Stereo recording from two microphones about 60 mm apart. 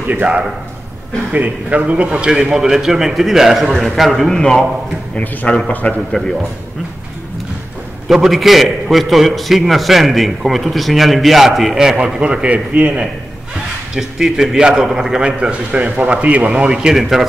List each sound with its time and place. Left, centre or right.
0.1 s a man's voice: right; by 4.6 s centre
5.1 s speech: left
8.1 s a man's voice: centre; by 13.1 s right
13.9 s a man's voice: centre